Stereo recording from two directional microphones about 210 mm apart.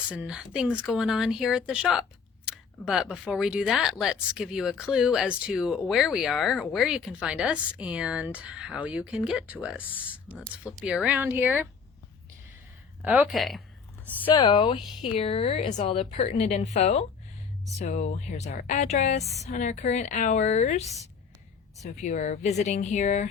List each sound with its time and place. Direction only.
0.1 s speech: 5° right (ahead or behind)
13.0 s speech: 10° right (ahead or behind)
14.3 s a woman's voice: 25° left (ahead or behind)
21.9 s a woman's voice: 35° left (ahead or behind)